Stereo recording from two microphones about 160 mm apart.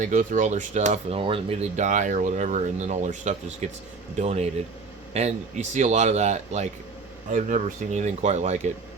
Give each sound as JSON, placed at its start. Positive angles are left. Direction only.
{"t": 0.0, "sound": "speech", "side_deg": -50}
{"t": 1.2, "sound": "speech", "side_deg": -35}